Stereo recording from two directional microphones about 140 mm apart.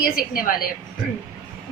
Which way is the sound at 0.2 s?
90° left.